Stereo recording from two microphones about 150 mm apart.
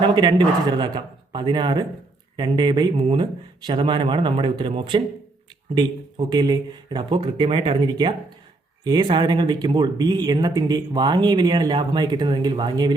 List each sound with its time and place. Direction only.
0.0 s speech: 30° right (ahead or behind)